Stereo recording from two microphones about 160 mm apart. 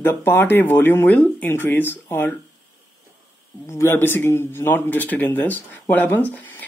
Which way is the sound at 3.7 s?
15° left (ahead or behind).